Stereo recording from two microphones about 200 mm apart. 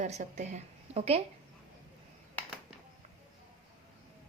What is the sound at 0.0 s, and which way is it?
A woman's voice, 35° right (ahead or behind).